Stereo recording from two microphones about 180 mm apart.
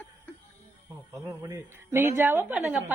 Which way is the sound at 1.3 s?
15° right (ahead or behind).